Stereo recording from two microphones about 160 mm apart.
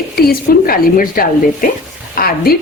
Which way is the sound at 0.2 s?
65° left (ahead or behind).